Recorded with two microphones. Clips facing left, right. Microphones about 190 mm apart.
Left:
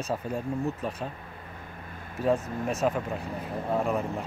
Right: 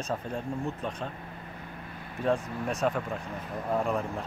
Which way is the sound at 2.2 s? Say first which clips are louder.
Left 2 dB; 5° left (ahead or behind).